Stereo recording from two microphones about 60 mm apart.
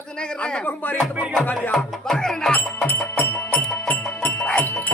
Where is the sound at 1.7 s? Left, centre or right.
Centre.